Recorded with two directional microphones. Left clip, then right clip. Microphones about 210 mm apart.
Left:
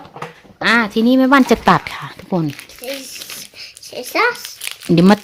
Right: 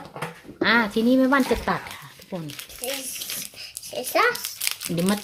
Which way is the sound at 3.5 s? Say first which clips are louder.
Left 3 dB; 45° left (ahead or behind).